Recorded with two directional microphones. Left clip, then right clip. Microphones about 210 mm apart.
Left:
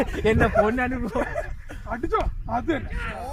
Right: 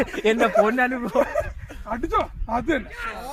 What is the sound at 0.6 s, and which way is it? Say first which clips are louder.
Speech: right 3 dB; 20° right (ahead or behind).